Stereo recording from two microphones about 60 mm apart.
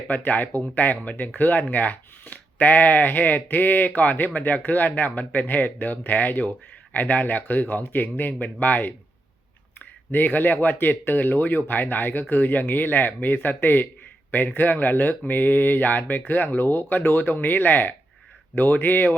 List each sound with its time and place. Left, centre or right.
0.1 s speech: left